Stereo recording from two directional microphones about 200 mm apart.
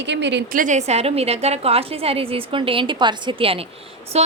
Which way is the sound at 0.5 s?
40° right (ahead or behind).